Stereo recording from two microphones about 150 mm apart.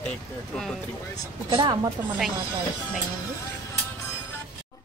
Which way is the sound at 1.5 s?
30° right (ahead or behind).